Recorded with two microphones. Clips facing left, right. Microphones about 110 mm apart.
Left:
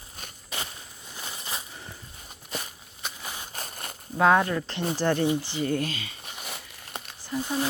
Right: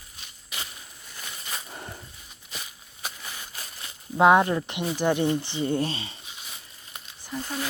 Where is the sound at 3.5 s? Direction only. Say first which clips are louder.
Left 4 dB; 45° left (ahead or behind).